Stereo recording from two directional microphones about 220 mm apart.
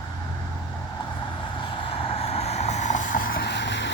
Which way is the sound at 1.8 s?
25° left (ahead or behind).